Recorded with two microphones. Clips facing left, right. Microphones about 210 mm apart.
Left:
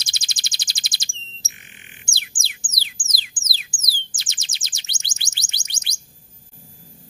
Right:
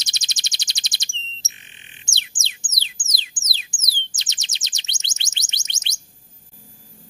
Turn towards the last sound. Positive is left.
turn(degrees=-20)  # may be behind; listen again after turning